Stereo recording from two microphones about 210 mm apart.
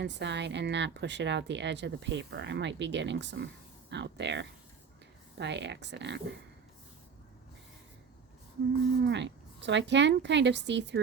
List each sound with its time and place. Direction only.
0.0 s a woman's voice: 55° right (ahead or behind)
9.0 s a woman's voice: 55° right (ahead or behind)